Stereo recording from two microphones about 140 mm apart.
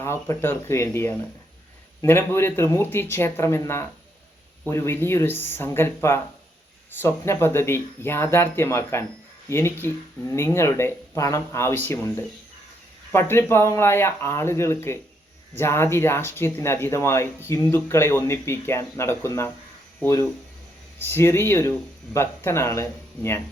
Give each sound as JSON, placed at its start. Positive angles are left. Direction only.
{"t": 0.0, "sound": "speech", "side_deg": 15}